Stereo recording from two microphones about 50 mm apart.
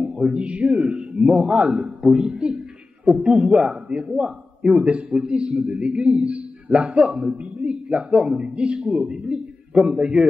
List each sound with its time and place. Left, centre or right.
0.0 s a man's voice: centre
2.0 s a woman's voice: centre
3.1 s a man's voice: right